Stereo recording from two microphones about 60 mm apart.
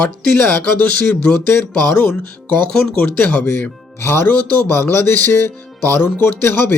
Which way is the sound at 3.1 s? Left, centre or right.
Left.